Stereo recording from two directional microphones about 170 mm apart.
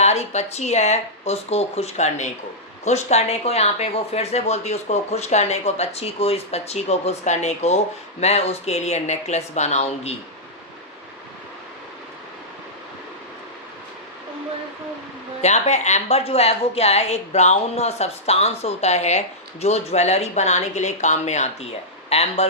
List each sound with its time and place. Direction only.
0.0 s speech: 40° left (ahead or behind)
15.4 s speech: 40° left (ahead or behind)